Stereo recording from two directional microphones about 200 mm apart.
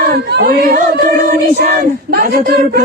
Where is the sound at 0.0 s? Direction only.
50° right (ahead or behind).